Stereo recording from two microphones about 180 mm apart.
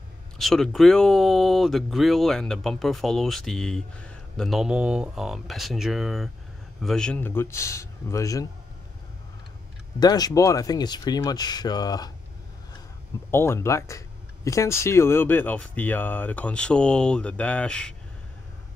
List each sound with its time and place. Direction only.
0.4 s speech: centre (ahead or behind); by 8.5 s 15° left (ahead or behind)
9.9 s speech: 20° left (ahead or behind)
13.3 s speech: 15° left (ahead or behind)